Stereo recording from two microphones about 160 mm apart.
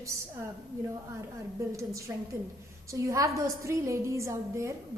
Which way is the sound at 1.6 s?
20° right (ahead or behind).